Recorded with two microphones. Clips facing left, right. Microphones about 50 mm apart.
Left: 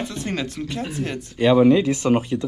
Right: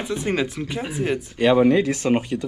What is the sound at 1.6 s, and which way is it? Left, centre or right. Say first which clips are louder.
Speech: left 2 dB; right.